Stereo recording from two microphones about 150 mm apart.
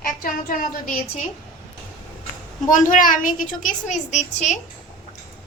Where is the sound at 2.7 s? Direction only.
60° left (ahead or behind).